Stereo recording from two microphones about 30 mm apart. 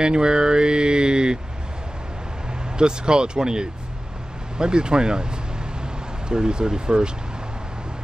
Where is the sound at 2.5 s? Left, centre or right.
Right.